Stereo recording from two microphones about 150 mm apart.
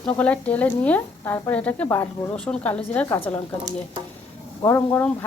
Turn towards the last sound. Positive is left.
turn(degrees=15)  # may be behind; listen again after turning